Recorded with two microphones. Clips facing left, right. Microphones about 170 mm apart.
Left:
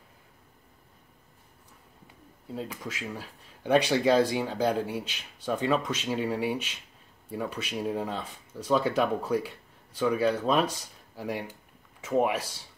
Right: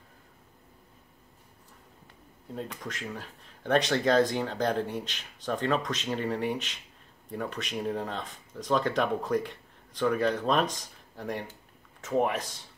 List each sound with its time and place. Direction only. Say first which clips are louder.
2.5 s speech: left 1 dB; 5° left (ahead or behind)